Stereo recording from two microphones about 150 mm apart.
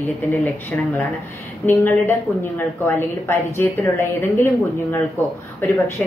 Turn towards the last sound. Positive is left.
turn(degrees=10)  # may be behind; listen again after turning